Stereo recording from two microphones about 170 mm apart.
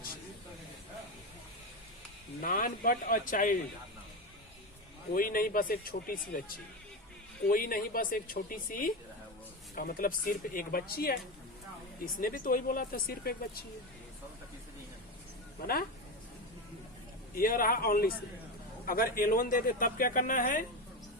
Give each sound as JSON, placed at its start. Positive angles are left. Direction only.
{"t": 2.4, "sound": "a man's voice", "side_deg": 55}
{"t": 5.1, "sound": "speech", "side_deg": 55}
{"t": 12.2, "sound": "speech", "side_deg": 55}
{"t": 17.3, "sound": "speech", "side_deg": 55}